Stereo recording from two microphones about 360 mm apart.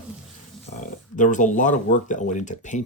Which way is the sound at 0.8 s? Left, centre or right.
Left.